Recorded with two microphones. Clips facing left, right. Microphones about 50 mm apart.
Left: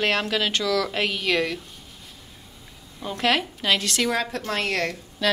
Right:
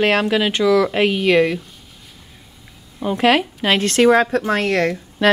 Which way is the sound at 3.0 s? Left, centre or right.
Centre.